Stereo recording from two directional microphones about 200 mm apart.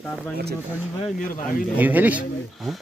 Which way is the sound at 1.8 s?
10° right (ahead or behind).